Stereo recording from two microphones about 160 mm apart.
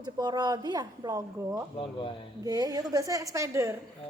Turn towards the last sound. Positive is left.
turn(degrees=-20)  # may be behind; listen again after turning